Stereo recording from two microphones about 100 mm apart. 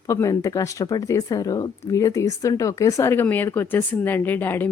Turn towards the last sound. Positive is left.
turn(degrees=20)  # may be behind; listen again after turning